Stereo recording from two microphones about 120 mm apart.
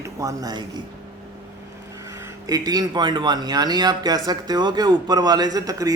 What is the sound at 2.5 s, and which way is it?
Speech, 30° right (ahead or behind).